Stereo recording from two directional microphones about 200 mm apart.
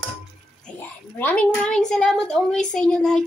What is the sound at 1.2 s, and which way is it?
A woman's voice, 5° left (ahead or behind).